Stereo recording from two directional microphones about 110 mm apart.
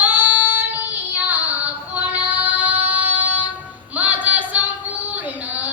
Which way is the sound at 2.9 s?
15° right (ahead or behind).